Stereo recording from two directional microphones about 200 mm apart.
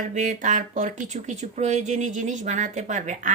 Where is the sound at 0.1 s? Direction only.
40° right (ahead or behind).